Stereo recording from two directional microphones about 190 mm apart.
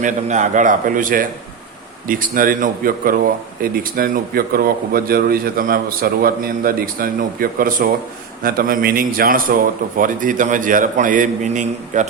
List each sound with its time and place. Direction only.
0.0 s a man's voice: 40° right (ahead or behind)